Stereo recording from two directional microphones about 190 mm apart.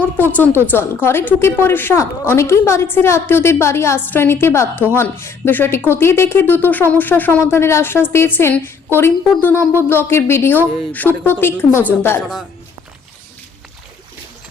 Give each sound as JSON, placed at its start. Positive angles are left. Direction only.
{"t": 0.2, "sound": "speech", "side_deg": 10}